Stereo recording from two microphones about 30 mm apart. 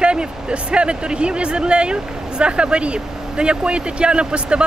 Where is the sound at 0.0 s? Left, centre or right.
Right.